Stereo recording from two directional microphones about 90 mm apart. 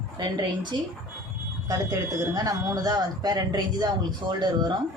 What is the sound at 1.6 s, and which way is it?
A woman's voice, 40° right (ahead or behind).